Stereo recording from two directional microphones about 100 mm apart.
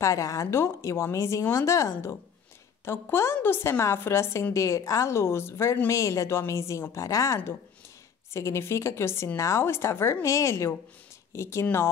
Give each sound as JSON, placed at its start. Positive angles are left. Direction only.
{"t": 0.0, "sound": "a woman's voice", "side_deg": 30}